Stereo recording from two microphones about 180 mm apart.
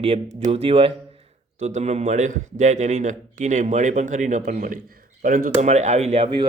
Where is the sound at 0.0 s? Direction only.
35° right (ahead or behind).